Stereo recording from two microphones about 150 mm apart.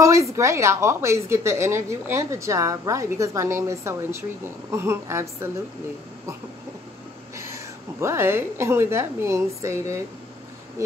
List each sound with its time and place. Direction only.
0.0 s speech: 20° right (ahead or behind)
8.0 s a woman's voice: 15° right (ahead or behind)